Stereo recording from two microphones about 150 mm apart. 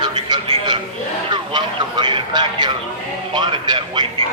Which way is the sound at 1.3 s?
30° right (ahead or behind).